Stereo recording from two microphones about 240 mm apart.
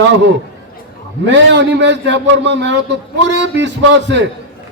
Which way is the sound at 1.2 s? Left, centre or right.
Right.